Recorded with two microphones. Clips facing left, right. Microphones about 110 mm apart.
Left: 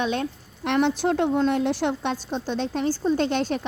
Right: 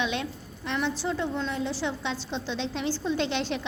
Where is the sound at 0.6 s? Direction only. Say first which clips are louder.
Left 8 dB; 65° left (ahead or behind).